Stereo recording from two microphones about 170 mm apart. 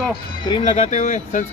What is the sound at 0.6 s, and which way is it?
Speech, 45° left (ahead or behind).